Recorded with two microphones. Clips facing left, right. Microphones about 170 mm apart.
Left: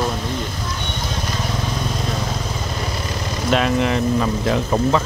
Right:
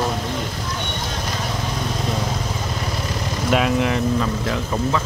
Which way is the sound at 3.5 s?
5° right (ahead or behind).